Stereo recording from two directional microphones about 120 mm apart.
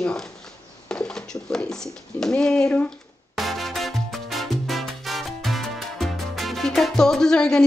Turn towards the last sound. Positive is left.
turn(degrees=5)  # may be behind; listen again after turning